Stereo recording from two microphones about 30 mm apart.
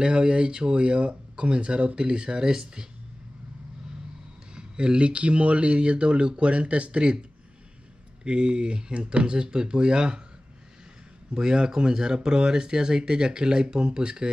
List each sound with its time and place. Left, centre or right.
0.0 s speech: right
2.0 s speech: right
4.6 s speech: right
11.3 s speech: right